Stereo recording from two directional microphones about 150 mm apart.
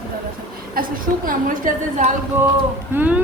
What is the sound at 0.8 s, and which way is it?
Speech, 75° right (ahead or behind).